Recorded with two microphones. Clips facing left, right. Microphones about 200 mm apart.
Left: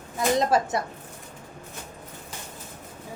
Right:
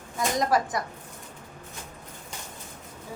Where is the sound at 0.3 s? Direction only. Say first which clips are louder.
Left 1 dB; 25° left (ahead or behind).